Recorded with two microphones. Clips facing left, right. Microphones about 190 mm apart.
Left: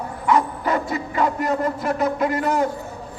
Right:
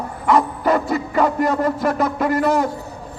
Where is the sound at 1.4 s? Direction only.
35° right (ahead or behind).